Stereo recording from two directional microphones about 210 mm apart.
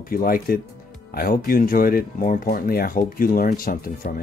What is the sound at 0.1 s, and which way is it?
Speech, 45° left (ahead or behind).